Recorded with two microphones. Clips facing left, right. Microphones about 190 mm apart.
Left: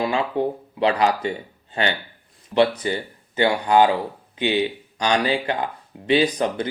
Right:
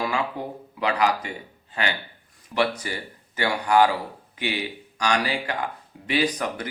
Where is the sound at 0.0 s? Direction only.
25° left (ahead or behind).